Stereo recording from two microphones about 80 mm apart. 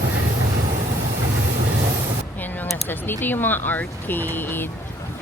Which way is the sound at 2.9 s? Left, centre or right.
Left.